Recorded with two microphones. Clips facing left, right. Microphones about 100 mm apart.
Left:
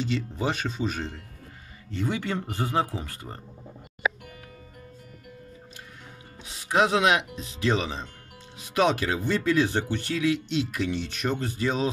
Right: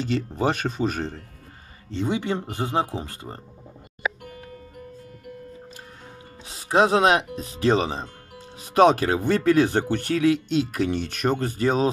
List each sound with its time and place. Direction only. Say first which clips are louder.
0.0 s speech: right 4 dB; 50° right (ahead or behind)
1.9 s speech: right 4 dB; 20° right (ahead or behind)
6.4 s speech: right 4 dB; 35° right (ahead or behind)